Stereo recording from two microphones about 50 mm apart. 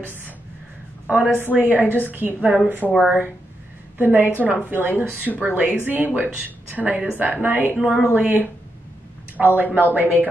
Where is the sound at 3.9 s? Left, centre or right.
Right.